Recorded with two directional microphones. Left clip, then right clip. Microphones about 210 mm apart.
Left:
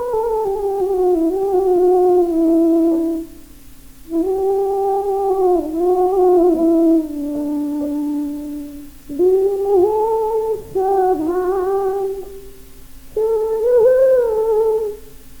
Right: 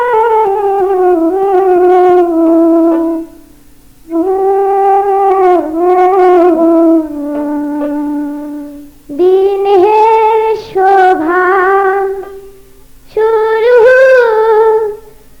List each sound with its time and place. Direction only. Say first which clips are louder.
0.0 s music: right 10 dB; 30° left (ahead or behind)
4.2 s theremin: right 7 dB; 30° left (ahead or behind)
9.1 s a sound: right 7 dB; 30° left (ahead or behind)
13.1 s humming: right 8 dB; 30° left (ahead or behind)